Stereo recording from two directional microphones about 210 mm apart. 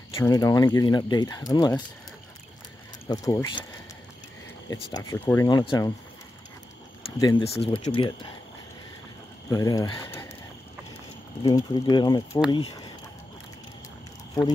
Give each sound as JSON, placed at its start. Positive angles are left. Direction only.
{"t": 0.2, "sound": "speech", "side_deg": 15}
{"t": 3.1, "sound": "speech", "side_deg": 15}
{"t": 4.9, "sound": "speech", "side_deg": 15}
{"t": 7.2, "sound": "speech", "side_deg": 20}
{"t": 9.5, "sound": "speech", "side_deg": 15}
{"t": 11.4, "sound": "speech", "side_deg": 20}
{"t": 14.4, "sound": "speech", "side_deg": 15}